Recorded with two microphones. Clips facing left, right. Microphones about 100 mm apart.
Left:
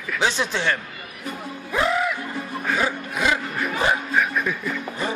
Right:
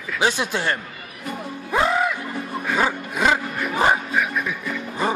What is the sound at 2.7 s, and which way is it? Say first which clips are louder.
Dog: right 3 dB; 40° right (ahead or behind).